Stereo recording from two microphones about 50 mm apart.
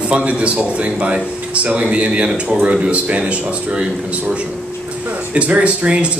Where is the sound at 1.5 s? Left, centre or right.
Right.